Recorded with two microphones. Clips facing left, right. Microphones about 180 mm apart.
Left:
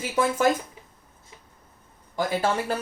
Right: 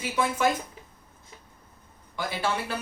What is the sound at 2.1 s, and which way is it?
Speech, 45° left (ahead or behind).